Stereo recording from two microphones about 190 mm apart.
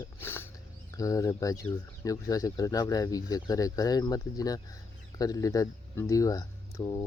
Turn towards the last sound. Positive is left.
turn(degrees=15)  # may be behind; listen again after turning